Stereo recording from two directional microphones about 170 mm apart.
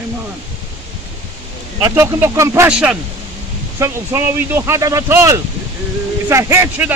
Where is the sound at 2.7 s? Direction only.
5° right (ahead or behind).